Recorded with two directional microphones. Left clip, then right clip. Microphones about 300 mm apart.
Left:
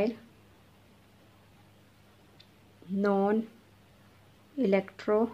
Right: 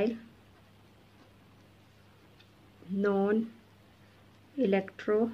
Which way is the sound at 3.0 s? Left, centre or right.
Centre.